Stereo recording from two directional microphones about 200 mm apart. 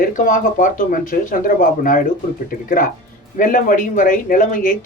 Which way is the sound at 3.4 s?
40° left (ahead or behind).